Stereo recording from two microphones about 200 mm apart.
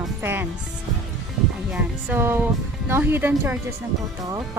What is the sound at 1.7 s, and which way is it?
Speech, 10° right (ahead or behind).